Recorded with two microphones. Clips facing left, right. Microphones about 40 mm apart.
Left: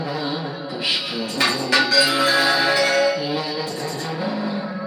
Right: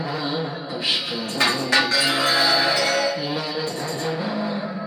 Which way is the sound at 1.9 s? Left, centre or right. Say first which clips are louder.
Left 3 dB; right.